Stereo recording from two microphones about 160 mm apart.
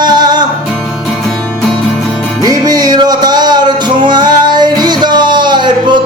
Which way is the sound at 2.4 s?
25° right (ahead or behind).